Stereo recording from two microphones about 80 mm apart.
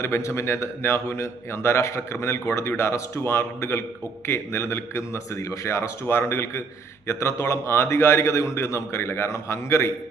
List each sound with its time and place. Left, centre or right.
0.0 s a man's voice: left